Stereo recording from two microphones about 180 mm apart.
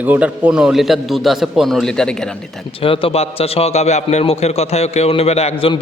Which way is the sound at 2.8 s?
30° left (ahead or behind).